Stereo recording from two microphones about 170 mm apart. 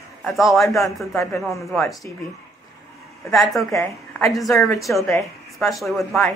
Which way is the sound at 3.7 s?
20° left (ahead or behind).